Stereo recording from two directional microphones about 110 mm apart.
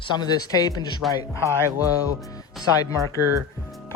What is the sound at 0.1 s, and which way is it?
Speech, 40° left (ahead or behind).